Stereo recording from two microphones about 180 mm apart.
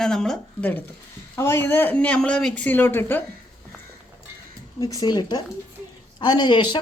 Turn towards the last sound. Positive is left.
turn(degrees=25)  # may be behind; listen again after turning